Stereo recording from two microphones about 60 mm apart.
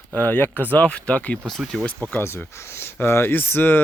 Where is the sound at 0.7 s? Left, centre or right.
Left.